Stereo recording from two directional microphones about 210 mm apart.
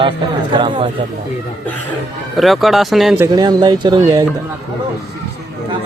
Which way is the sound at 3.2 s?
20° right (ahead or behind).